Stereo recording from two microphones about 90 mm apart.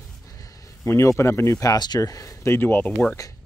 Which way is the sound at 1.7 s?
45° left (ahead or behind).